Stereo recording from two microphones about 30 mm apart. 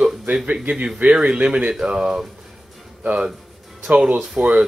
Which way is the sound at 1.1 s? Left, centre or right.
Right.